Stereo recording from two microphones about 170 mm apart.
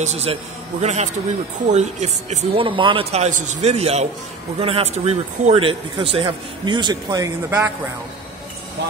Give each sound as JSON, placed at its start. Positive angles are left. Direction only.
{"t": 0.0, "sound": "speech", "side_deg": -40}